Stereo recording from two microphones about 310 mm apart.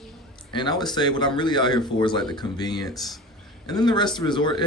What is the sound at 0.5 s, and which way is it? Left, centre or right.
Speech, centre.